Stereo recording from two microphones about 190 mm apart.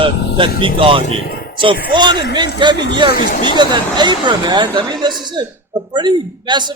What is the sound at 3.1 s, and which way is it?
Speech, 50° left (ahead or behind).